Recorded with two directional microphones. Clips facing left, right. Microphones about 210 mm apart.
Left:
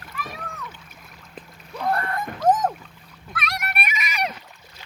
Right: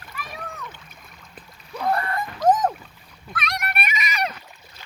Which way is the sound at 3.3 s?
5° left (ahead or behind).